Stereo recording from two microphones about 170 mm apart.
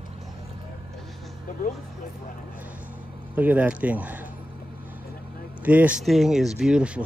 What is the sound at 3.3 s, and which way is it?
Speech, 10° right (ahead or behind).